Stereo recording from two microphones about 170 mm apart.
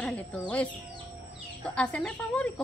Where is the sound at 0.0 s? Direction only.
5° left (ahead or behind).